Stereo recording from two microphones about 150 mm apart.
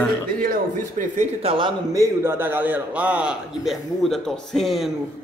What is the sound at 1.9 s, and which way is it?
A man's voice, 20° right (ahead or behind).